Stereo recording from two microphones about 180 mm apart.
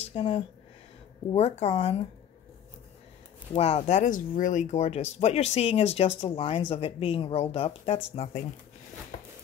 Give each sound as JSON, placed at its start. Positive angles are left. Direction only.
{"t": 0.0, "sound": "a sound", "side_deg": 30}
{"t": 1.6, "sound": "speech", "side_deg": 35}
{"t": 3.5, "sound": "speech", "side_deg": 35}